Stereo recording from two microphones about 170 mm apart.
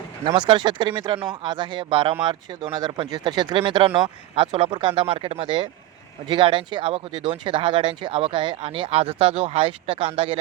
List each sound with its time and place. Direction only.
0.3 s speech: 25° right (ahead or behind)